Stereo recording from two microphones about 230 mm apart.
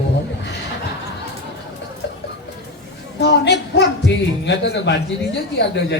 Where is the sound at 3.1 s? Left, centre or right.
Left.